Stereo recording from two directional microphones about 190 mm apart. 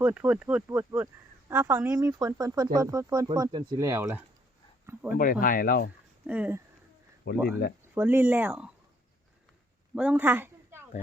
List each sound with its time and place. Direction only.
0.0 s speech: 10° right (ahead or behind)
5.1 s speech: 50° left (ahead or behind)
6.2 s speech: 10° right (ahead or behind)
7.3 s speech: 55° left (ahead or behind)
7.9 s speech: 10° right (ahead or behind)
9.9 s a sound: 10° right (ahead or behind)